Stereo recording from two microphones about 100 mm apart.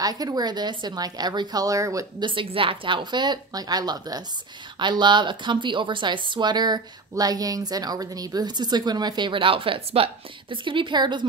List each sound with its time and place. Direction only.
0.0 s a woman's voice: 40° right (ahead or behind)
2.1 s a woman's voice: 55° right (ahead or behind)